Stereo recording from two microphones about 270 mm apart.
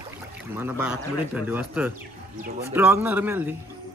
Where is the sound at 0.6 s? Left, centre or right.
Centre.